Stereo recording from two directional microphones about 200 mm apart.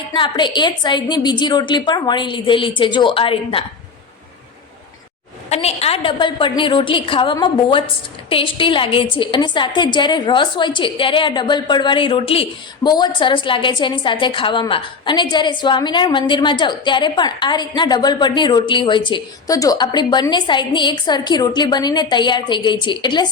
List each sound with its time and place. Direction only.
0.1 s a woman's voice: 25° left (ahead or behind)
5.5 s a woman's voice: 30° left (ahead or behind)